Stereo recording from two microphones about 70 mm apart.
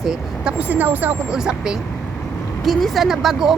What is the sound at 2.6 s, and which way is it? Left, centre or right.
Speech, centre.